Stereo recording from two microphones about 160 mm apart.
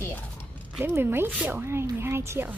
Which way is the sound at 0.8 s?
15° right (ahead or behind).